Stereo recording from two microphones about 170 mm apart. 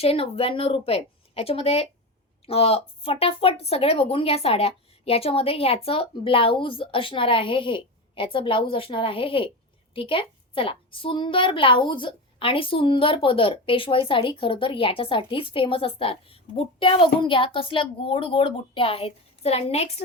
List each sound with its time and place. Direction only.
0.0 s a woman's voice: 35° left (ahead or behind)